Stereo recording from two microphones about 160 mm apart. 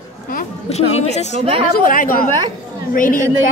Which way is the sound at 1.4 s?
35° right (ahead or behind).